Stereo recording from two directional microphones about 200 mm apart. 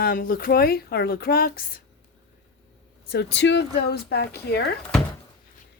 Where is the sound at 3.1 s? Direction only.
60° left (ahead or behind).